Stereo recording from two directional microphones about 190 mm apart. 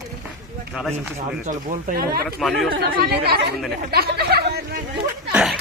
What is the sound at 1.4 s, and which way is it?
Speech, 40° right (ahead or behind).